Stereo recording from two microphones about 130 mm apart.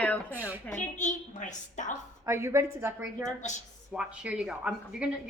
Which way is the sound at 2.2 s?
20° right (ahead or behind).